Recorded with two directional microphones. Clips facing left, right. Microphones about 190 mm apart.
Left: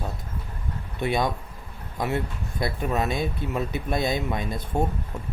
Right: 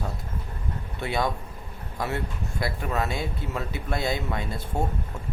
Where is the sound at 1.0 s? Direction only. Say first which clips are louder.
Left 2 dB; 20° left (ahead or behind).